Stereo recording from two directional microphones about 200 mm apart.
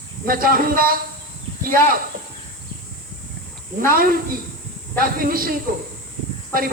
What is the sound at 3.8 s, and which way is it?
Speech, 45° right (ahead or behind).